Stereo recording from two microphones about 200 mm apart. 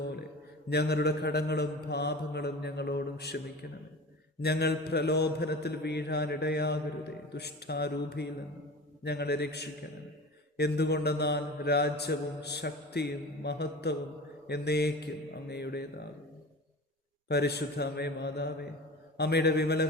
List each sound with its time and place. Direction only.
0.7 s mantra: 55° left (ahead or behind)
17.2 s mantra: 55° left (ahead or behind)